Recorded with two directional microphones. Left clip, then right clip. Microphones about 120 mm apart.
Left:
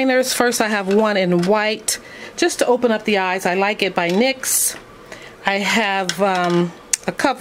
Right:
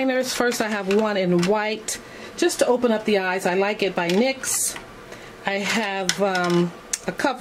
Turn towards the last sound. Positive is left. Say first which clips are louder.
# left 5 dB
turn(degrees=40)  # may be behind; listen again after turning